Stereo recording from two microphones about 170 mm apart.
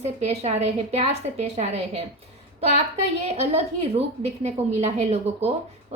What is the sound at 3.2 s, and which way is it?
A woman's voice, 40° right (ahead or behind).